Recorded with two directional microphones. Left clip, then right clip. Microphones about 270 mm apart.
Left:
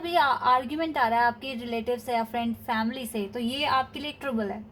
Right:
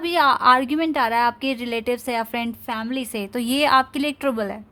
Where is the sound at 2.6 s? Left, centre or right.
Right.